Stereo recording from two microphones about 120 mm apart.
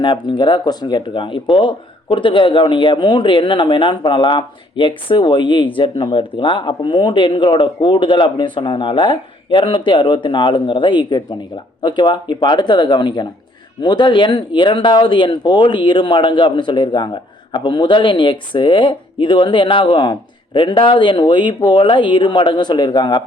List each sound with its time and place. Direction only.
0.0 s speech: 40° left (ahead or behind)